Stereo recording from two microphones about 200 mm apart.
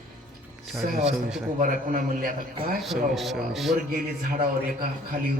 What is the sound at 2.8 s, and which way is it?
Speech, centre (ahead or behind).